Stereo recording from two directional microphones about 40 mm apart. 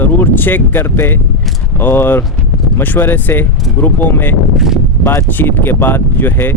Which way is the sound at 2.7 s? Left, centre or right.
Left.